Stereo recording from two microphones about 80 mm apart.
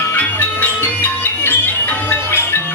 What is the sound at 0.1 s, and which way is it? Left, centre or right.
Music, left.